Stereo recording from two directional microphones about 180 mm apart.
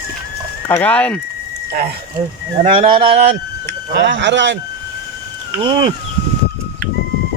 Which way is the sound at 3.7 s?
75° right (ahead or behind).